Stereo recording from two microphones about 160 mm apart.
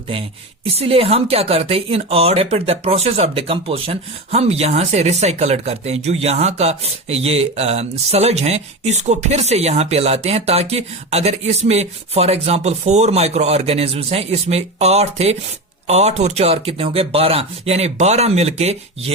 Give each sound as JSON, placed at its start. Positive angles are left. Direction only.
{"t": 0.1, "sound": "speech", "side_deg": -35}